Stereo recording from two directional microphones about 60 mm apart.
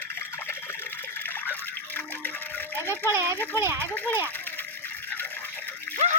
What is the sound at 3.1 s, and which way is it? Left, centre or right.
Speech, right.